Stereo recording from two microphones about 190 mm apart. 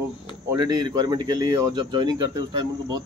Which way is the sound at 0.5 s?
20° right (ahead or behind).